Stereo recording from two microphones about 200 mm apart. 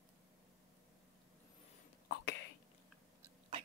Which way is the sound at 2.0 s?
55° left (ahead or behind).